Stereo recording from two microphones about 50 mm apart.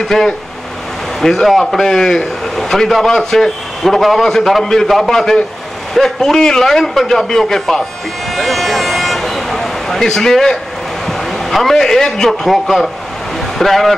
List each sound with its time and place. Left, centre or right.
0.0 s a man's voice: centre
8.4 s vehicle: centre
11.1 s a man's voice: centre